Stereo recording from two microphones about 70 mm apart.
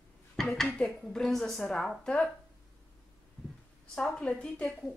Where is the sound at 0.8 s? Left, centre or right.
Centre.